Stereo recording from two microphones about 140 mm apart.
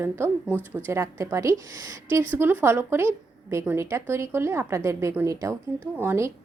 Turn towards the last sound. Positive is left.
turn(degrees=-20)  # may be behind; listen again after turning